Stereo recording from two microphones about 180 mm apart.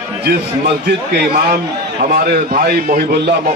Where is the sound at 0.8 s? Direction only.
60° right (ahead or behind).